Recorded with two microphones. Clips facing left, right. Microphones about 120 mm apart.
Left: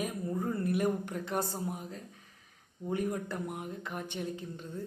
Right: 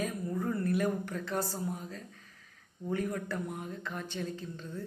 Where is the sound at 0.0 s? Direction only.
20° left (ahead or behind).